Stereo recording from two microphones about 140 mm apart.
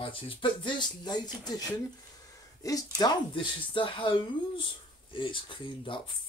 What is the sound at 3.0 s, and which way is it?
Speech, 30° left (ahead or behind).